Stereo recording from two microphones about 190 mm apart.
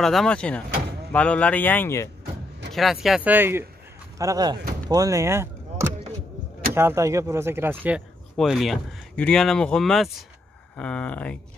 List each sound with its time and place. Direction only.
0.0 s speech: centre (ahead or behind)
2.7 s speech: centre (ahead or behind)